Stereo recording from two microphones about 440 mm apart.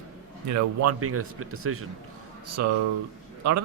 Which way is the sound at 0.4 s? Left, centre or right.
Right.